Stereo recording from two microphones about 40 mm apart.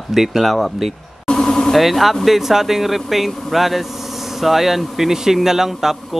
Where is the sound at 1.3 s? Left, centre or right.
Centre.